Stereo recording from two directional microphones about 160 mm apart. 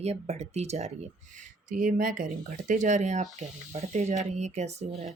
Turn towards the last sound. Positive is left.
turn(degrees=-45)  # may be behind; listen again after turning